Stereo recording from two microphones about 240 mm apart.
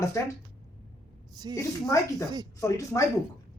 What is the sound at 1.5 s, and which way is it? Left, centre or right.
A man's voice, centre.